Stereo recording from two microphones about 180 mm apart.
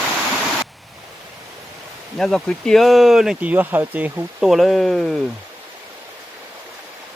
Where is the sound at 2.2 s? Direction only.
5° left (ahead or behind).